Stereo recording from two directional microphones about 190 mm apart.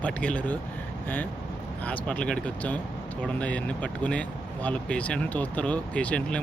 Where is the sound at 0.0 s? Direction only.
5° left (ahead or behind).